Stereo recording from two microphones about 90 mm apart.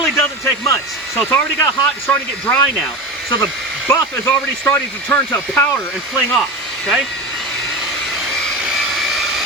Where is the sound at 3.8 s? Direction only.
20° left (ahead or behind).